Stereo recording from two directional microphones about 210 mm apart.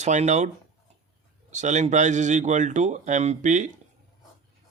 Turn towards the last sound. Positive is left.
turn(degrees=-35)  # may be behind; listen again after turning